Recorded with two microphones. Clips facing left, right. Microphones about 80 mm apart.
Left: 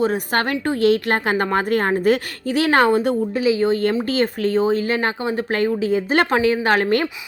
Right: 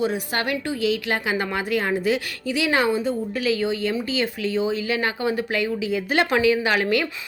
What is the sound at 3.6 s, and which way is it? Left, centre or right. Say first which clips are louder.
A woman's voice: left 5 dB; left.